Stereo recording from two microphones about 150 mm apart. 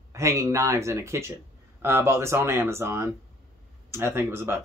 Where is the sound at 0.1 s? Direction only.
20° right (ahead or behind).